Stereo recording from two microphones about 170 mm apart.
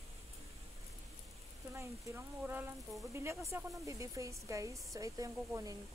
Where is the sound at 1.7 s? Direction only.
15° right (ahead or behind).